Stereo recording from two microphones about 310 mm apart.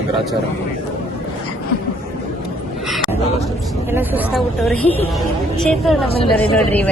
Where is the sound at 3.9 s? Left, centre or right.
Centre.